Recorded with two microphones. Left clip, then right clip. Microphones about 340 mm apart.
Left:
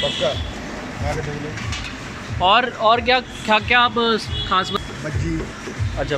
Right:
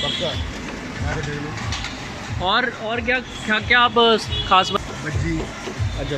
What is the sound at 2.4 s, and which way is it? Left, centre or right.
Speech, centre.